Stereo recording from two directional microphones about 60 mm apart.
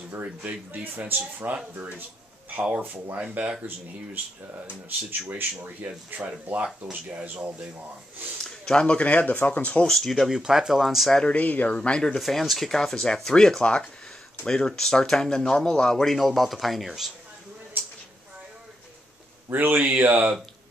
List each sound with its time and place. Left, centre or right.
0.1 s speech: right
2.7 s speech: right
8.5 s speech: centre
9.8 s speech: centre
10.3 s speech: centre
11.1 s speech: centre
12.2 s speech: centre
19.5 s speech: right